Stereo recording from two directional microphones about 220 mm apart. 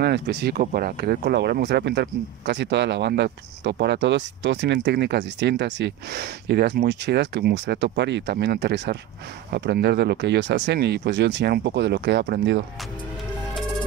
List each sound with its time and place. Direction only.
0.0 s speech: 50° right (ahead or behind)